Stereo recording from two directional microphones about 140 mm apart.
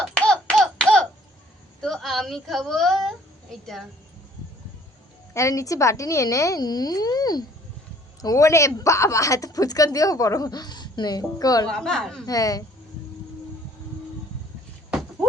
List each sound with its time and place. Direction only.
0.0 s a sound: 5° left (ahead or behind)
1.8 s a woman's voice: centre (ahead or behind)
5.3 s a woman's voice: 20° left (ahead or behind)
11.7 s a woman's voice: 5° left (ahead or behind)
12.2 s a woman's voice: 25° left (ahead or behind)